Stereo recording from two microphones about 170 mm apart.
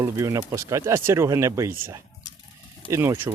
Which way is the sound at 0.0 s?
20° right (ahead or behind).